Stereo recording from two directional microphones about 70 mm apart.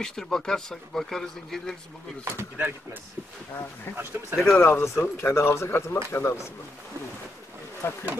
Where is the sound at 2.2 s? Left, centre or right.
Right.